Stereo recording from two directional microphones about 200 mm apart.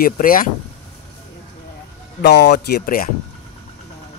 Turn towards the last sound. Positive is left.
turn(degrees=45)  # may be behind; listen again after turning